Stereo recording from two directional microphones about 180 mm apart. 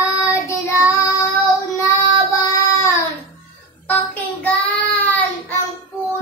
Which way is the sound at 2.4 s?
15° left (ahead or behind).